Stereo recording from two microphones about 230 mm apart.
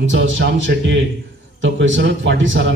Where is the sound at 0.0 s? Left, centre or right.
Right.